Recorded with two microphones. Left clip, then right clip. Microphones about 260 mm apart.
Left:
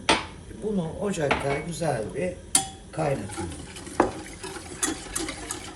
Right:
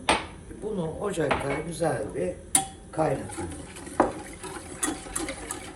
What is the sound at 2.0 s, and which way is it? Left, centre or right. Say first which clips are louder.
Dishes: left 1 dB; centre.